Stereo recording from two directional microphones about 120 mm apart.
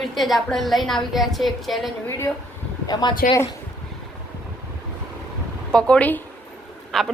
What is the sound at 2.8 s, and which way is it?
Speech, 35° left (ahead or behind).